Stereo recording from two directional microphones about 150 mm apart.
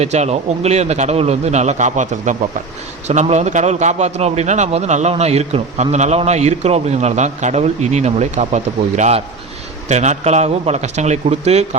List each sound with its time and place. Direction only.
0.0 s a man's voice: 45° right (ahead or behind)